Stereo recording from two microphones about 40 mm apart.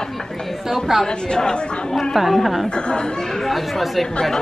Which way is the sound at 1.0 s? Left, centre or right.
Centre.